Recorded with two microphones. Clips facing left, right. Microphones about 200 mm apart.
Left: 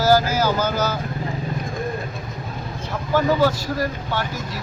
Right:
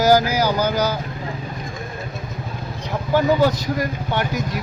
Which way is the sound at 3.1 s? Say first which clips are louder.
Right 2 dB; 15° right (ahead or behind).